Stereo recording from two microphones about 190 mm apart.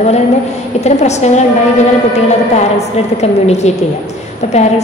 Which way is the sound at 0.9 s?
35° left (ahead or behind).